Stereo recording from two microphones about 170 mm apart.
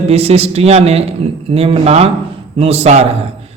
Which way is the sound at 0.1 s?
40° right (ahead or behind).